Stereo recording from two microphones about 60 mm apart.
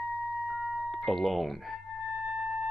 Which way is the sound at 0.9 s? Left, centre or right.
Centre.